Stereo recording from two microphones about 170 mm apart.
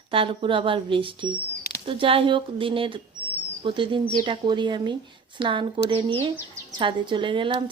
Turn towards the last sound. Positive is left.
turn(degrees=-30)  # may be behind; listen again after turning